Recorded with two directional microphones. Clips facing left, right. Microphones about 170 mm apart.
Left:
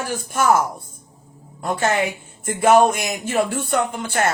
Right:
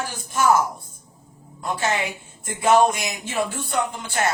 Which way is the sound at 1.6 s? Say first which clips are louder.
Left 4 dB; 50° left (ahead or behind).